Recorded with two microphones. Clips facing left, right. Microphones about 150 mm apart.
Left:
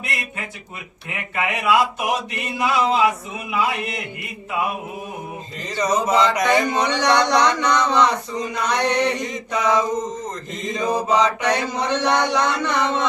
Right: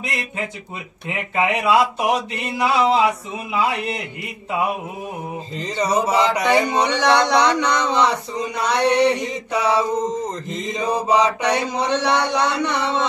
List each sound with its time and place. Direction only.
1.3 s speech: 30° right (ahead or behind)
5.9 s mantra: 10° right (ahead or behind)